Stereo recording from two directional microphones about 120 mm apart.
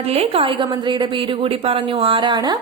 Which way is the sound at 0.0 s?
55° right (ahead or behind).